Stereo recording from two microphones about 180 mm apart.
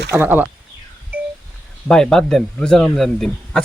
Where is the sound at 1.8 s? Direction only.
5° left (ahead or behind).